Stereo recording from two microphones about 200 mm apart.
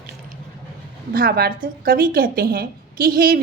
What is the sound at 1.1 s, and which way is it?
A woman's voice, 45° right (ahead or behind).